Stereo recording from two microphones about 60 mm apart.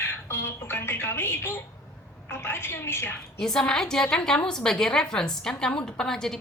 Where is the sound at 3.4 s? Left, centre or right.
Centre.